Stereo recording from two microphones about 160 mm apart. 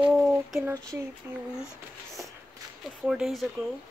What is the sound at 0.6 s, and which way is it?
Speech, 20° right (ahead or behind).